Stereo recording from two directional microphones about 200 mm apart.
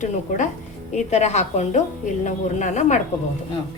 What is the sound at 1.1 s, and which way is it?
A woman's voice, 35° left (ahead or behind).